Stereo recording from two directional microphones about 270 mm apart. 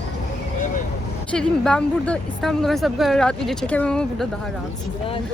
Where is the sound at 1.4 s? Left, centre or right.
Centre.